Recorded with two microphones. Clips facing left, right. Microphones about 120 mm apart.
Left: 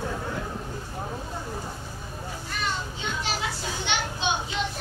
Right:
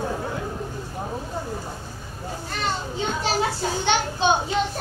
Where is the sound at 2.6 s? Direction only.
40° right (ahead or behind).